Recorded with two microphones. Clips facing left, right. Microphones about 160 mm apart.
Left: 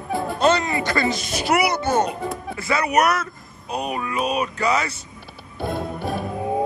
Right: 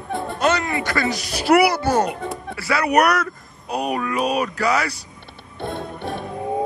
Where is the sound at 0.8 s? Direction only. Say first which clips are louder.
Left 1 dB; 20° left (ahead or behind).